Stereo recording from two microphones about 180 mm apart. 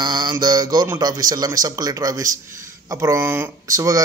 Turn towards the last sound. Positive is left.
turn(degrees=-20)  # may be behind; listen again after turning